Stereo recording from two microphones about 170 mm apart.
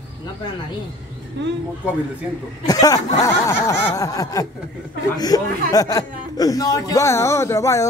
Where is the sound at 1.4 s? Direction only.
90° right.